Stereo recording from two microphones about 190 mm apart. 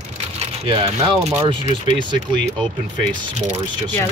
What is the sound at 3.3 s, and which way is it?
Speech, 35° right (ahead or behind).